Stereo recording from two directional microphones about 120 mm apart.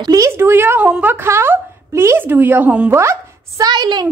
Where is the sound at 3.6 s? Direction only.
35° right (ahead or behind).